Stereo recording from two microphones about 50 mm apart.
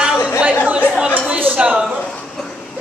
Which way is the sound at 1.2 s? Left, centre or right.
Right.